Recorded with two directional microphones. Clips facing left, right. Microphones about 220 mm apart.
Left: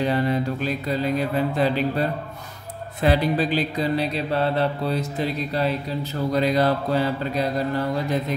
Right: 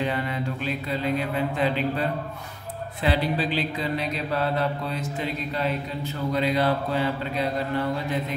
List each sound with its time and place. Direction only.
0.0 s mantra: 40° left (ahead or behind)